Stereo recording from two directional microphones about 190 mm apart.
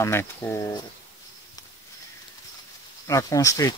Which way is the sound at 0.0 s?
10° left (ahead or behind).